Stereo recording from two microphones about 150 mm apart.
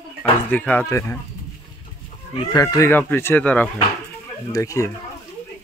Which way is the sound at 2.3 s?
25° left (ahead or behind).